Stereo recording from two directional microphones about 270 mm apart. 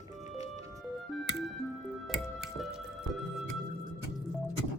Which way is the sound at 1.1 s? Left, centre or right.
Centre.